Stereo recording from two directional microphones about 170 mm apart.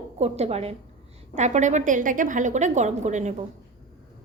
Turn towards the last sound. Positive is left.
turn(degrees=-45)  # may be behind; listen again after turning